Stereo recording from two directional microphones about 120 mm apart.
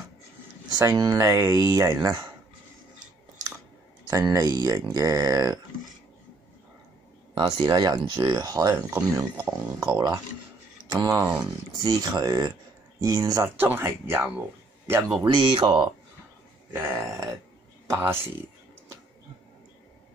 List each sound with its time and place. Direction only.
0.7 s speech: 30° right (ahead or behind)
4.1 s speech: 30° right (ahead or behind)
7.3 s speech: 35° right (ahead or behind)
8.7 s speech: 20° right (ahead or behind)
13.6 s speech: 20° right (ahead or behind)
15.2 s speech: 45° right (ahead or behind)
16.7 s speech: 20° right (ahead or behind)